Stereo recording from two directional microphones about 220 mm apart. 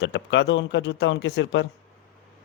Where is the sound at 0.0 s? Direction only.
50° left (ahead or behind).